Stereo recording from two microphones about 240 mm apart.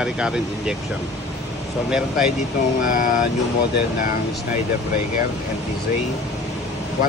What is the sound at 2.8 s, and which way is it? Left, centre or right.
Speech, left.